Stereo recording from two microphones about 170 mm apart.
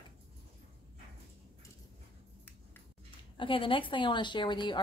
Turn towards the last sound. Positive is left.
turn(degrees=25)  # may be behind; listen again after turning